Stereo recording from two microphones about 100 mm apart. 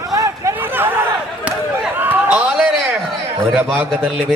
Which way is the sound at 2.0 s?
15° right (ahead or behind).